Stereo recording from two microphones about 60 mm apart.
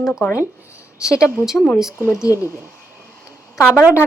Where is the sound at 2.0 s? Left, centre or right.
Left.